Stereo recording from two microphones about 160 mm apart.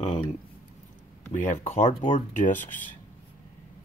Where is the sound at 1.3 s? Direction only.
50° left (ahead or behind).